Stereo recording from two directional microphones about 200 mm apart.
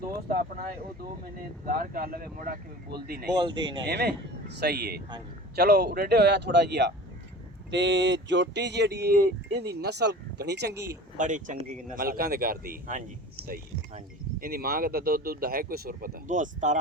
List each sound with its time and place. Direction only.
1.2 s speech: 45° right (ahead or behind)
3.3 s speech: 25° right (ahead or behind)
3.8 s speech: 55° right (ahead or behind)
11.2 s speech: 40° right (ahead or behind)